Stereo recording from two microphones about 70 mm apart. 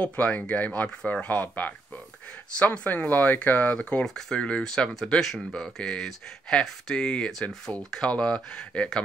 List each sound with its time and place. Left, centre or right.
0.0 s speech: centre
4.0 s speech: centre